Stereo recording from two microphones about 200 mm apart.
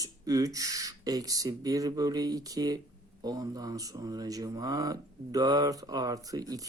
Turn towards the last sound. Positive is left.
turn(degrees=-20)  # may be behind; listen again after turning